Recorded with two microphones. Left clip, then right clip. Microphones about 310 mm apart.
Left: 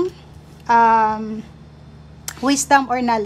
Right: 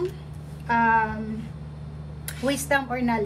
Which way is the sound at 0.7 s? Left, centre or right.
Centre.